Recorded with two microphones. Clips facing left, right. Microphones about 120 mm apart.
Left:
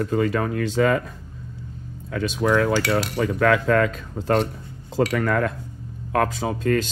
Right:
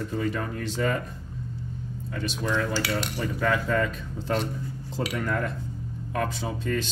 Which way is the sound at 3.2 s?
75° left (ahead or behind).